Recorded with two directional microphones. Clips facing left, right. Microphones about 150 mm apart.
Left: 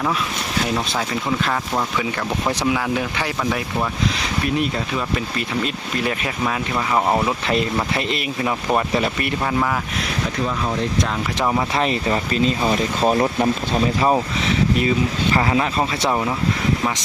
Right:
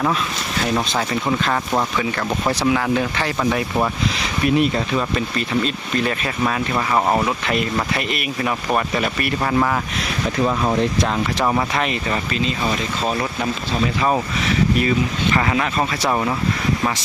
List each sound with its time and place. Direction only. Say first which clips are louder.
2.5 s speech: right 3 dB; 10° left (ahead or behind)
5.6 s speech: right 2 dB; 15° left (ahead or behind)
7.4 s speech: left 1 dB; 25° left (ahead or behind)
11.8 s speech: left 2 dB; 30° left (ahead or behind)
12.6 s speech: left 4 dB; 25° left (ahead or behind)
14.8 s speech: even; 25° left (ahead or behind)
16.0 s speech: right 1 dB; 5° left (ahead or behind)